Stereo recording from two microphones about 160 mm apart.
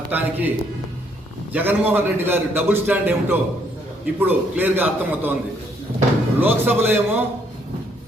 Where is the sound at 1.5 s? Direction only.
10° right (ahead or behind).